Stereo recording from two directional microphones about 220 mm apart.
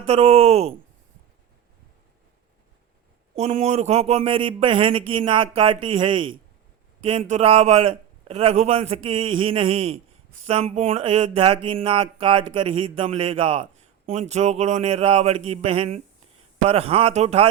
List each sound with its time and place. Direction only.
0.0 s a man's voice: 25° right (ahead or behind)
3.3 s a man's voice: 30° right (ahead or behind)